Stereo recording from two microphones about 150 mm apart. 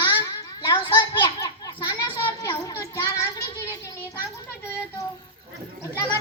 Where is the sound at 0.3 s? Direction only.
25° left (ahead or behind).